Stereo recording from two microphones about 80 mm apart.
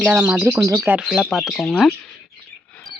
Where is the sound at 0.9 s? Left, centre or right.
Right.